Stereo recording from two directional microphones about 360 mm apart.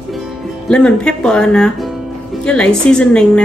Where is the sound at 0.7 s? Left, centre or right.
Centre.